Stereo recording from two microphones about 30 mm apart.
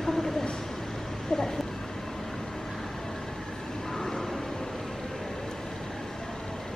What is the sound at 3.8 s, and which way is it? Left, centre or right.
Vehicle, centre.